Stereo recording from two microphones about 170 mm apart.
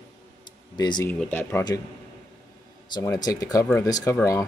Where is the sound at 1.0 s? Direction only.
10° left (ahead or behind).